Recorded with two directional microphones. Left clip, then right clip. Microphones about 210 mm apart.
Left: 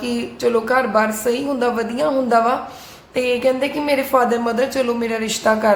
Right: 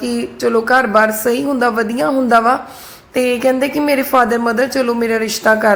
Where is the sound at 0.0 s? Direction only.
25° right (ahead or behind).